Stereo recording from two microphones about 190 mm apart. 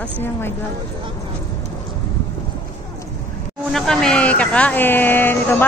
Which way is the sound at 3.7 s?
Centre (ahead or behind).